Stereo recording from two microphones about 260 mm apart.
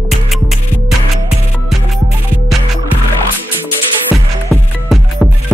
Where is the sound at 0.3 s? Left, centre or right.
Centre.